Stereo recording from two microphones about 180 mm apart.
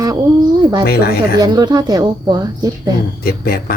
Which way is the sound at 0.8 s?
60° left (ahead or behind).